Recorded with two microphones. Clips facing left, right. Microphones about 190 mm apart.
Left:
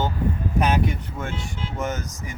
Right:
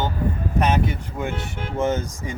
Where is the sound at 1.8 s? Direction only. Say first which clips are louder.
Right 7 dB; 30° right (ahead or behind).